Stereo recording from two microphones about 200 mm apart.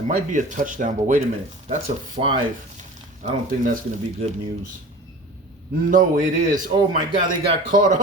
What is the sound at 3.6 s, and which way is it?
Speech, 40° right (ahead or behind).